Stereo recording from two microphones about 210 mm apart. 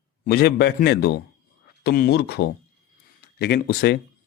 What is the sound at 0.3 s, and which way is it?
A man's voice, 50° left (ahead or behind).